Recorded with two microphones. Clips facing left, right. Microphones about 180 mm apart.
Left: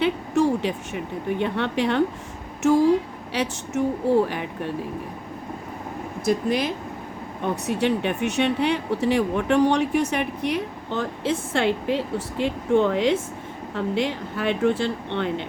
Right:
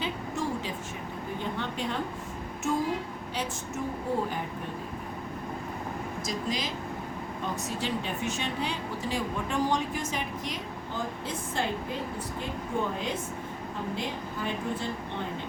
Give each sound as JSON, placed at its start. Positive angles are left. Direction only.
{"t": 0.0, "sound": "a sound", "side_deg": 70}
{"t": 1.4, "sound": "speech", "side_deg": 70}
{"t": 6.2, "sound": "speech", "side_deg": 60}